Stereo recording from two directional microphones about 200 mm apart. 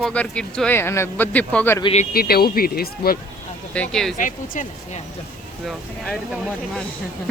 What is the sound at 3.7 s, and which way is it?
Speech, 5° left (ahead or behind).